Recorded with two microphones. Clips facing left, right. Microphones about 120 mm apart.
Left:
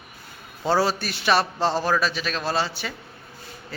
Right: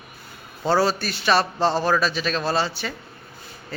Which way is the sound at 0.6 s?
10° left (ahead or behind).